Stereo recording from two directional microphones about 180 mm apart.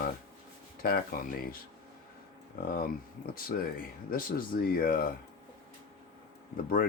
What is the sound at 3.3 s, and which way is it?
Speech, 55° left (ahead or behind).